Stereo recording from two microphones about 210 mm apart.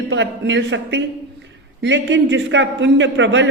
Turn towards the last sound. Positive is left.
turn(degrees=-60)  # may be behind; listen again after turning